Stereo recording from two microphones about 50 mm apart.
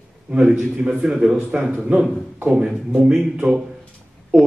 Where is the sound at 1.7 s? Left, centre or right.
Right.